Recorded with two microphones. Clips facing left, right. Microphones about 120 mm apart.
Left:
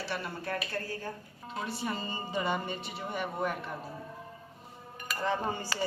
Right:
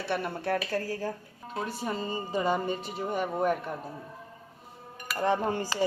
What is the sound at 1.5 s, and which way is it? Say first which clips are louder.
Speech: right 2 dB; 45° right (ahead or behind).